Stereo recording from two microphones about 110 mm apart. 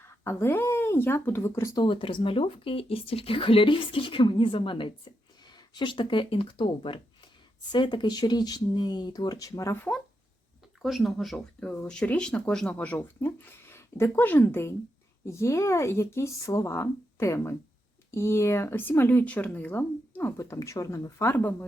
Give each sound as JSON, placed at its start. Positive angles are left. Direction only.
{"t": 0.0, "sound": "speech", "side_deg": 20}
{"t": 1.7, "sound": "speech", "side_deg": 45}
{"t": 10.8, "sound": "speech", "side_deg": 0}
{"t": 20.3, "sound": "speech", "side_deg": 25}